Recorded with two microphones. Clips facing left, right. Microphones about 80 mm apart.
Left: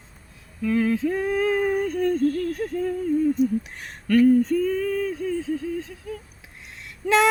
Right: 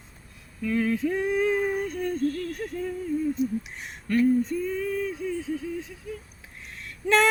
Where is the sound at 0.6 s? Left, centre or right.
Left.